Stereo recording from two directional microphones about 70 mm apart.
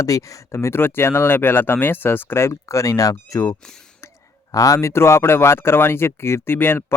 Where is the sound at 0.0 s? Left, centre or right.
Left.